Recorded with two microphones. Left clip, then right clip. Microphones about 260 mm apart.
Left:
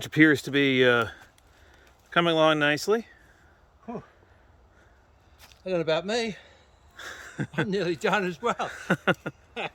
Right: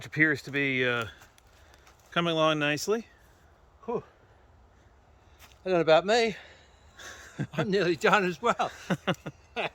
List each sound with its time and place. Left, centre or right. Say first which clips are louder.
0.0 s speech: left 5 dB; left
2.0 s speech: left 4 dB; centre
5.6 s a man's voice: right 4 dB; centre
6.9 s a sound: left 4 dB; centre
7.7 s speech: right 3 dB; centre
8.9 s speech: left 6 dB; centre
9.6 s speech: right 2 dB; centre